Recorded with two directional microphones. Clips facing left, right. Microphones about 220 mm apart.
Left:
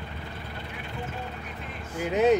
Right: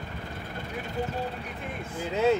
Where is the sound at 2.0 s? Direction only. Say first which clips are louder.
Left 3 dB; 15° left (ahead or behind).